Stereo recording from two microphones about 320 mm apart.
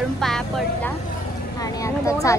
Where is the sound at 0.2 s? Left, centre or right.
Centre.